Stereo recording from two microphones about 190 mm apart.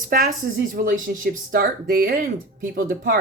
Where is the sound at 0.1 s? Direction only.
50° right (ahead or behind).